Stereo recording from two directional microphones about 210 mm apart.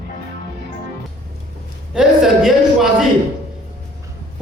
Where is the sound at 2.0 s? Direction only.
Centre (ahead or behind).